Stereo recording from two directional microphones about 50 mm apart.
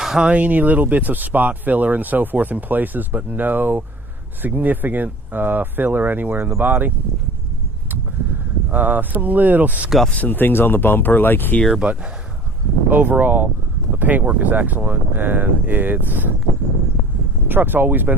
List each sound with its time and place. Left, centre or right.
0.0 s a sound: centre
0.3 s speech: right
8.7 s speech: right
10.2 s speech: left
11.8 s speech: right
12.9 s speech: right
17.5 s speech: right